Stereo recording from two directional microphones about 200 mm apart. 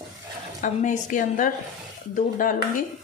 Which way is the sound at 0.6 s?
40° left (ahead or behind).